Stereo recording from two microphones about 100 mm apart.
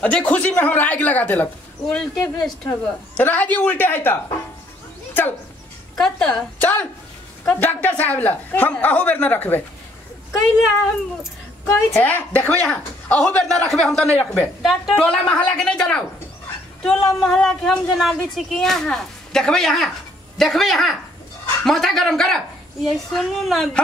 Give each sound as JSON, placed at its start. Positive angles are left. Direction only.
{"t": 0.0, "sound": "a man's voice", "side_deg": 15}
{"t": 5.9, "sound": "a woman's voice", "side_deg": 10}
{"t": 11.6, "sound": "a man's voice", "side_deg": 20}
{"t": 14.6, "sound": "a man's voice", "side_deg": 0}